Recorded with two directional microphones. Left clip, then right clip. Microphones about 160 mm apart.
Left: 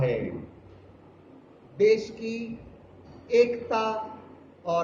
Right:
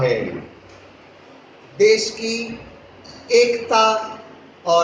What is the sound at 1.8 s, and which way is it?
A man's voice, 45° right (ahead or behind).